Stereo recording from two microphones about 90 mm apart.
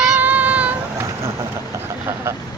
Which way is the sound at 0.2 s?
15° right (ahead or behind).